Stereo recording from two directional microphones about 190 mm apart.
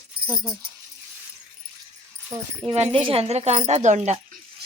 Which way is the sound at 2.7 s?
30° right (ahead or behind).